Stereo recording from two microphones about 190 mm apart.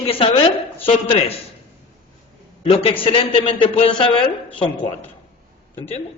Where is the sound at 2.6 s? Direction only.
30° left (ahead or behind).